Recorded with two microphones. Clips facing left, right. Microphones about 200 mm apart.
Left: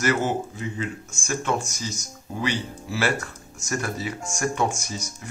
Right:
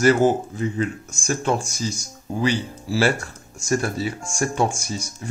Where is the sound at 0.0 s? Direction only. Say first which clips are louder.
Right 7 dB; 30° right (ahead or behind).